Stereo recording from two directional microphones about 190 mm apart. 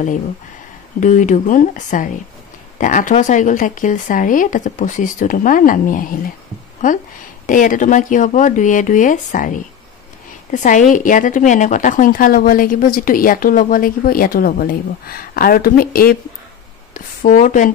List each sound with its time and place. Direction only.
1.0 s a woman's voice: 40° left (ahead or behind)
7.4 s a woman's voice: 45° left (ahead or behind)